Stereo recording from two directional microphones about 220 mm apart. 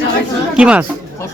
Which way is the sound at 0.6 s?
5° right (ahead or behind).